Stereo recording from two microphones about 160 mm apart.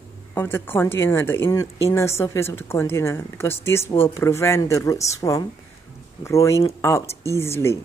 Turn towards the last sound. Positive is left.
turn(degrees=15)  # may be behind; listen again after turning